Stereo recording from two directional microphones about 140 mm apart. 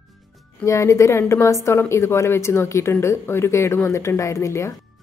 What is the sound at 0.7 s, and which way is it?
Speech, 20° left (ahead or behind).